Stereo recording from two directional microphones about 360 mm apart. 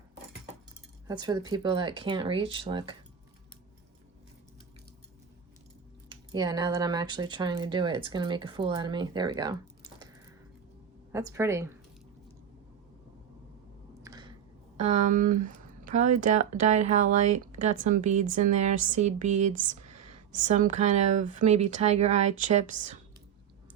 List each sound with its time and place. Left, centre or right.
1.0 s speech: centre
6.1 s speech: centre
11.1 s speech: centre
14.0 s a sound: centre
14.8 s speech: centre